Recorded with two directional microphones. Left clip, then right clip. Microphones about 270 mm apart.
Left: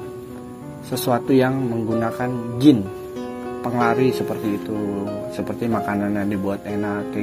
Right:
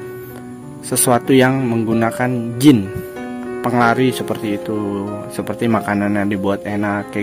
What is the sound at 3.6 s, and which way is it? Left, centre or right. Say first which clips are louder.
Speech: right 4 dB; right.